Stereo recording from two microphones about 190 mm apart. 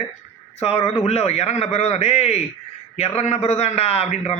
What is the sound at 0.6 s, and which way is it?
A man's voice, 30° left (ahead or behind).